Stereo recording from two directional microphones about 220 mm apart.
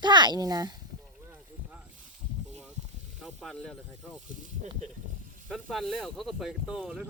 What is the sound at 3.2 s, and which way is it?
Speech, centre (ahead or behind).